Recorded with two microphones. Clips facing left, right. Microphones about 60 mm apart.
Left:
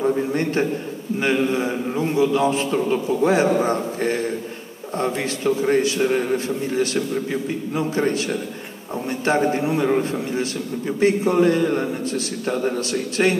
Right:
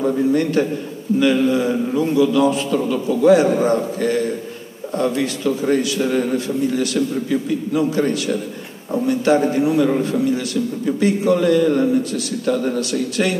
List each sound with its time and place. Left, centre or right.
0.0 s a man's voice: left